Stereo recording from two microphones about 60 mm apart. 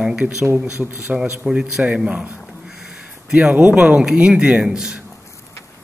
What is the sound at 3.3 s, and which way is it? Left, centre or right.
A man's voice, centre.